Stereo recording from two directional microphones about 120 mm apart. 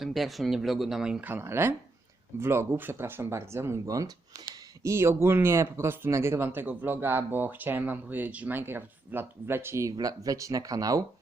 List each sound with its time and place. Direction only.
0.0 s speech: centre (ahead or behind); by 11.0 s 30° right (ahead or behind)